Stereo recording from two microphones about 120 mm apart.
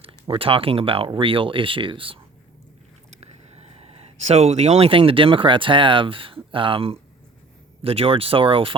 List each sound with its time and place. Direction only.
0.0 s speech: 50° right (ahead or behind)
3.1 s speech: 60° right (ahead or behind)